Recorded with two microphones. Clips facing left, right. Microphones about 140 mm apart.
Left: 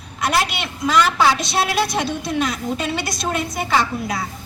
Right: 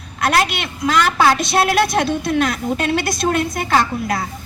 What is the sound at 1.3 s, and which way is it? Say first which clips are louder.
A woman's voice: right 4 dB; 50° right (ahead or behind).